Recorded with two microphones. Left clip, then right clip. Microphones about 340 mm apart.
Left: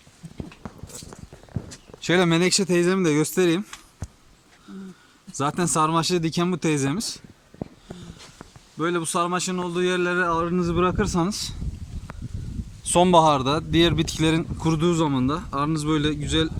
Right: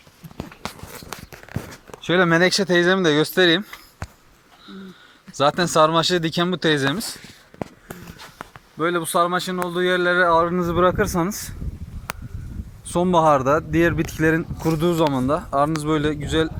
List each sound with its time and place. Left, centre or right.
0.6 s a sound: right
2.0 s speech: centre
4.7 s a sound: centre
5.3 s speech: centre
8.8 s speech: centre
12.9 s speech: left; by 16.5 s centre